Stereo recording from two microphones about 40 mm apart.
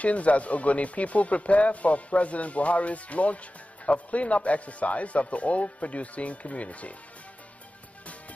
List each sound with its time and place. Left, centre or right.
0.0 s speech: left